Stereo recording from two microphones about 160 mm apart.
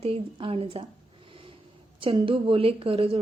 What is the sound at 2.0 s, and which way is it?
A woman's voice, 35° right (ahead or behind).